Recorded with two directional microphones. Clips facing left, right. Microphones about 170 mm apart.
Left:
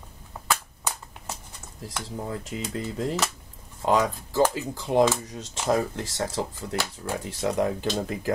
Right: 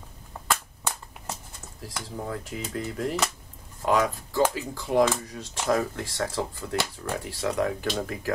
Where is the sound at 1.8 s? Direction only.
20° left (ahead or behind).